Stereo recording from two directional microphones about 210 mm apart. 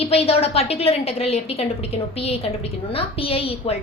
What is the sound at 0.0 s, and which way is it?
A woman's voice, 30° left (ahead or behind).